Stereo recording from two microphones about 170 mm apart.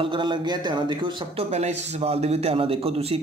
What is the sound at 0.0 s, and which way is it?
A man's voice, 30° right (ahead or behind).